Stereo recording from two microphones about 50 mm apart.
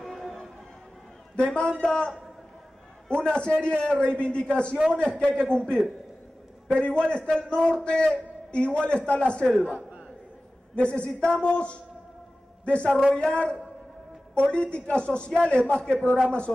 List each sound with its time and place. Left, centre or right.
0.0 s train: centre
1.3 s a man's voice: left
3.2 s a man's voice: centre
6.7 s a man's voice: centre
9.6 s speech: right
10.8 s a man's voice: left